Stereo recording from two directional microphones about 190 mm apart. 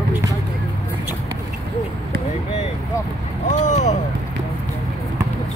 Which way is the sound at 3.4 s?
40° left (ahead or behind).